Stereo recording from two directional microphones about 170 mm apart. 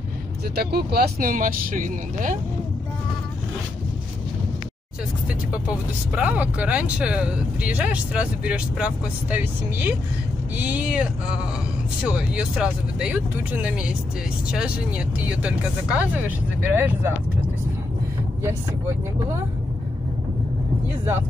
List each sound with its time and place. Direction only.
0.6 s speech: 70° right (ahead or behind); by 2.3 s 50° right (ahead or behind)
6.1 s speech: 10° right (ahead or behind)